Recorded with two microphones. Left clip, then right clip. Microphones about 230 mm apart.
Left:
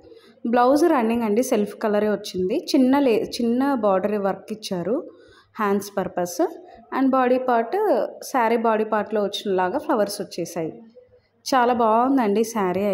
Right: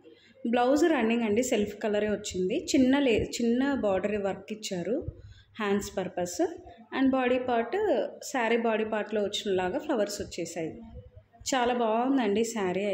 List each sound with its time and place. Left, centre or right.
0.5 s a woman's voice: centre